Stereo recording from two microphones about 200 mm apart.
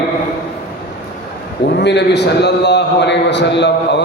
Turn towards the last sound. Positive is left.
turn(degrees=60)  # may be behind; listen again after turning